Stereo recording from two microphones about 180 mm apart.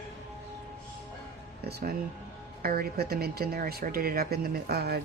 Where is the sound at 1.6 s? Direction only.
60° right (ahead or behind).